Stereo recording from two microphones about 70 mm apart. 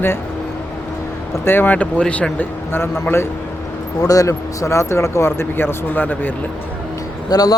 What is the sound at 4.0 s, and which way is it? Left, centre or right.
Speech, left.